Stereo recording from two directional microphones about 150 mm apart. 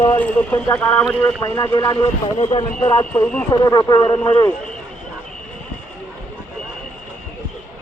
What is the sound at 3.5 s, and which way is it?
Speech, 25° left (ahead or behind).